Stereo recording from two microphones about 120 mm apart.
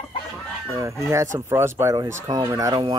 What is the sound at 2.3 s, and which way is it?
Chicken, 35° right (ahead or behind).